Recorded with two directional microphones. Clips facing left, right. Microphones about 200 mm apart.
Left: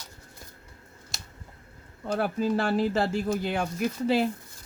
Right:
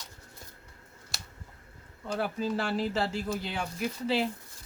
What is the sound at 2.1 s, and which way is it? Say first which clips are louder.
Speech: left 5 dB; 50° left (ahead or behind).